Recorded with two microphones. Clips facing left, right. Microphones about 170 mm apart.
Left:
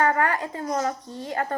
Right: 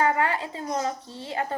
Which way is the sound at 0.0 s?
20° right (ahead or behind).